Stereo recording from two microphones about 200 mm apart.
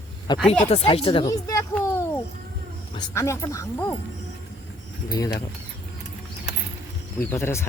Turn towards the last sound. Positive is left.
turn(degrees=10)  # may be behind; listen again after turning